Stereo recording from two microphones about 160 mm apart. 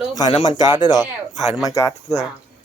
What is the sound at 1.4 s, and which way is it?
Speech, centre (ahead or behind).